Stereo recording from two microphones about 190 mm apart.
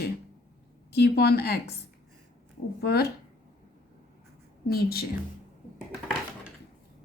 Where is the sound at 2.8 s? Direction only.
55° left (ahead or behind).